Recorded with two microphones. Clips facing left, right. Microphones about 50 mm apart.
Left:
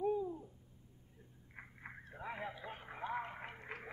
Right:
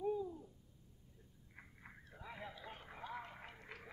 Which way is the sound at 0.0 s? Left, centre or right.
Left.